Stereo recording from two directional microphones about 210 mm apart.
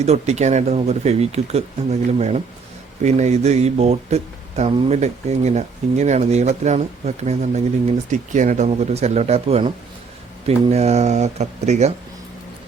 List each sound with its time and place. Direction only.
0.0 s speech: 30° right (ahead or behind)